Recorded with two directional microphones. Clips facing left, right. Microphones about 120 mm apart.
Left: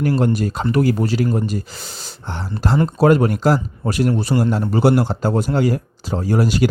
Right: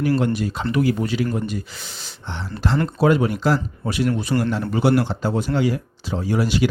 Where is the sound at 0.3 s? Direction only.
45° left (ahead or behind).